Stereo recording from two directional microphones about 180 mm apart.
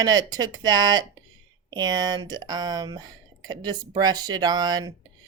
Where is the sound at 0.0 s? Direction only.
20° right (ahead or behind).